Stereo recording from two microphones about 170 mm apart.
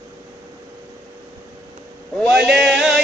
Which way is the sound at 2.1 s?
5° right (ahead or behind).